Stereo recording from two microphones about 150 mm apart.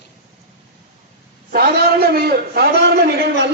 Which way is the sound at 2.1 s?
90° right.